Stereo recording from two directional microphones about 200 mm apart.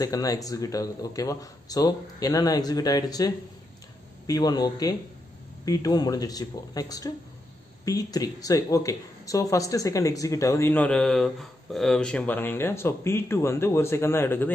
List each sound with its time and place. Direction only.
0.0 s speech: 15° left (ahead or behind)